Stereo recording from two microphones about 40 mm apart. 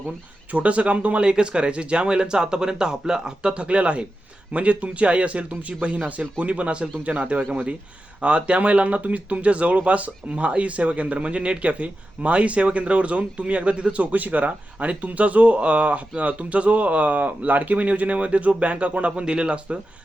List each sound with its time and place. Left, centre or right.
0.5 s a man's voice: right